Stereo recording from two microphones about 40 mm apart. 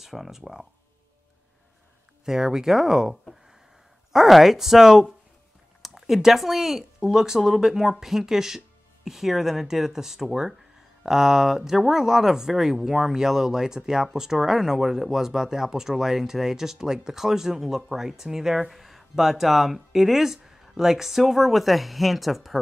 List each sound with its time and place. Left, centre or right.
0.0 s speech: centre
2.2 s speech: centre
4.1 s speech: centre